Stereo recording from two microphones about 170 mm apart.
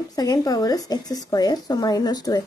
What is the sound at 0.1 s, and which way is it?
A woman's voice, 20° left (ahead or behind).